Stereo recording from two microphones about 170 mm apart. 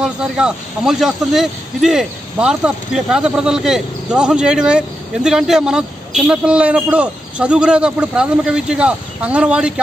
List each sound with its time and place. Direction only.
0.0 s speech: 5° right (ahead or behind)